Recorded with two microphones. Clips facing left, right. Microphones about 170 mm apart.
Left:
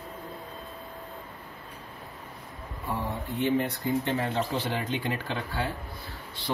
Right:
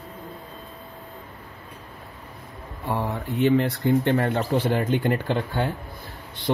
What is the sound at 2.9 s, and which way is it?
Speech, 85° right.